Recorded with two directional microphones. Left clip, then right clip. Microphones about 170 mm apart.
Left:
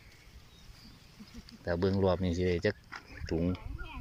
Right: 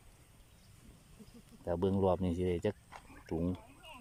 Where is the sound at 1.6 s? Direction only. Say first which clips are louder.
Left 2 dB; 20° right (ahead or behind).